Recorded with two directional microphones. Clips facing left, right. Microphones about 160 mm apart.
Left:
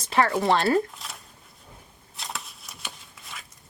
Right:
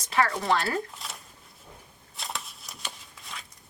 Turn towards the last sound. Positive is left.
turn(degrees=0)  # may be behind; listen again after turning